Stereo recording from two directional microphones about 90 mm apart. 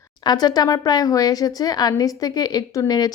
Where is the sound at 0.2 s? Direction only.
50° left (ahead or behind).